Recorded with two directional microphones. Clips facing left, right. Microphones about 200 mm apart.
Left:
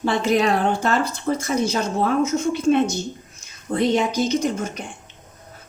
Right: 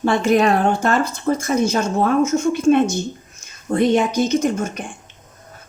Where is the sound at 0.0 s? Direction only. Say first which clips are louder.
Right 3 dB; 50° right (ahead or behind).